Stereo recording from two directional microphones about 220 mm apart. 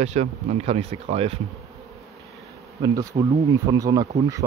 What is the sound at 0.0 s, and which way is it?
Speech, 30° right (ahead or behind).